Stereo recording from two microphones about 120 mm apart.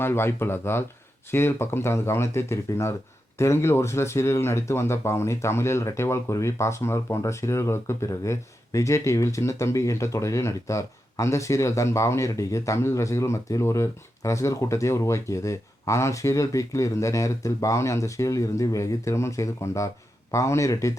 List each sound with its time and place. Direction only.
0.0 s speech: 20° left (ahead or behind)